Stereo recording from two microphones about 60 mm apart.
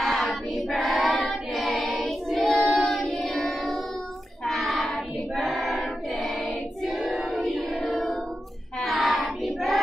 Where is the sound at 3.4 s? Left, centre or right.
Centre.